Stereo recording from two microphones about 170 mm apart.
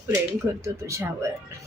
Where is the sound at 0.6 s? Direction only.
15° right (ahead or behind).